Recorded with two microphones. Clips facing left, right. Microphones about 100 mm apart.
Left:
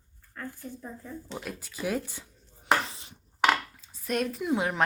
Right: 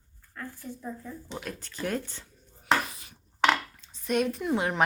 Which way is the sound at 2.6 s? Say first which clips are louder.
Even; 25° left (ahead or behind).